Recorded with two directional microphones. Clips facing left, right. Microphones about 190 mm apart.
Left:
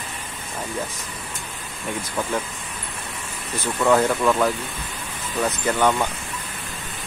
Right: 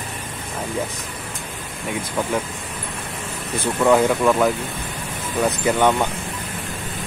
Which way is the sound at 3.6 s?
15° right (ahead or behind).